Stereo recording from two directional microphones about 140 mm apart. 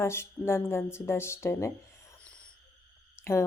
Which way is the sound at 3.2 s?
20° left (ahead or behind).